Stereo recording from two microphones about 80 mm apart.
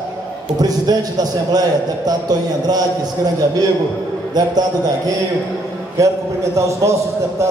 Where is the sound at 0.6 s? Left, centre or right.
Right.